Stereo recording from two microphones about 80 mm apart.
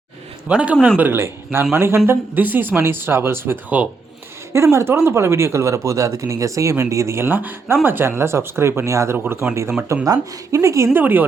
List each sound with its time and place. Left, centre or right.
0.4 s a man's voice: centre
4.5 s speech: right
7.3 s speech: right
10.9 s speech: right